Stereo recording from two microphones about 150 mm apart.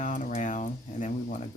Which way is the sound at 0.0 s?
55° left (ahead or behind).